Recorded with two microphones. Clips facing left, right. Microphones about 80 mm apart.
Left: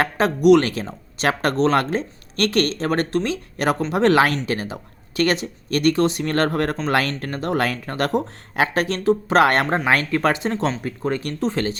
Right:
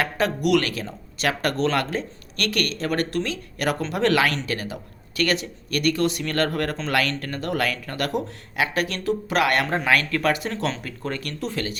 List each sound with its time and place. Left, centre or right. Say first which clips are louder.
0.0 s speech: left 6 dB; left